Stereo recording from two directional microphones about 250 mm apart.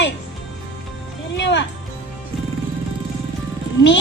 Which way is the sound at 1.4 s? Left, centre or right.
Left.